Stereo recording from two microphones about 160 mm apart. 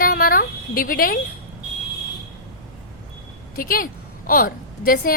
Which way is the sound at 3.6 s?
65° left (ahead or behind).